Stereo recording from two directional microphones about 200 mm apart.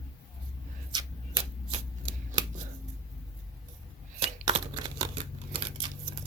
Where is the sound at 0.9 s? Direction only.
25° right (ahead or behind).